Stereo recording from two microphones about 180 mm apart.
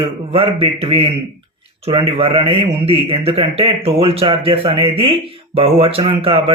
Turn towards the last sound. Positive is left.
turn(degrees=-30)  # may be behind; listen again after turning